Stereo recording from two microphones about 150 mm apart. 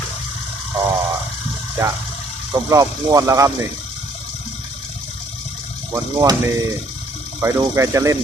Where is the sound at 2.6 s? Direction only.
25° right (ahead or behind).